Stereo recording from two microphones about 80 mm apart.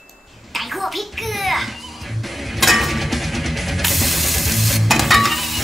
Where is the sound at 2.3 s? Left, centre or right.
Centre.